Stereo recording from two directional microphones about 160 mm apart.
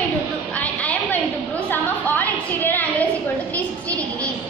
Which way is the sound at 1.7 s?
10° left (ahead or behind).